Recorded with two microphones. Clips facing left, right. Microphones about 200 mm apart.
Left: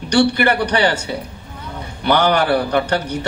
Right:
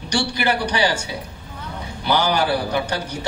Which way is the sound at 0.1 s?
60° left (ahead or behind).